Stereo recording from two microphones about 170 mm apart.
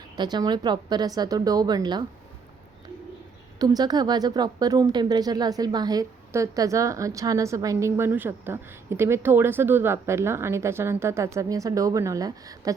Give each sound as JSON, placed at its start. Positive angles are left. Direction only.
{"t": 0.2, "sound": "a woman's voice", "side_deg": -25}
{"t": 3.6, "sound": "a woman's voice", "side_deg": -25}